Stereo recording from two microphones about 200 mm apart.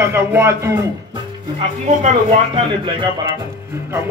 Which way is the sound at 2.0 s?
35° right (ahead or behind).